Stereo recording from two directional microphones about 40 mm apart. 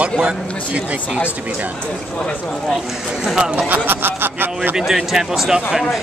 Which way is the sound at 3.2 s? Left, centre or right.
Centre.